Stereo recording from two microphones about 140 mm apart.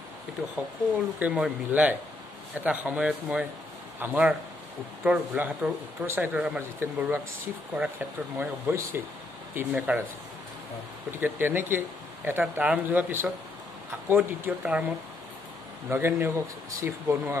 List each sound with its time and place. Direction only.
0.9 s speech: 10° right (ahead or behind)
11.1 s speech: 15° right (ahead or behind)